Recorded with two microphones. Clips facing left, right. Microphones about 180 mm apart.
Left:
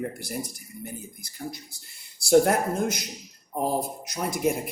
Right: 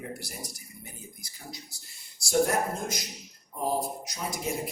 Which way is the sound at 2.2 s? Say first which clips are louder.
Left 6 dB; 60° left (ahead or behind).